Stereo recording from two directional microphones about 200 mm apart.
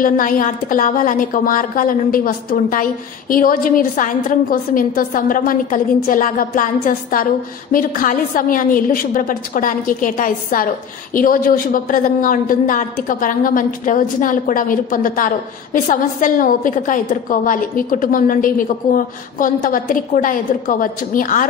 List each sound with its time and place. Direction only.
0.0 s a woman's voice: 45° left (ahead or behind)